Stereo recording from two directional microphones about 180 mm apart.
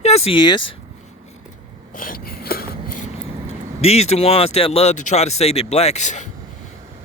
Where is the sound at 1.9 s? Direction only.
50° left (ahead or behind).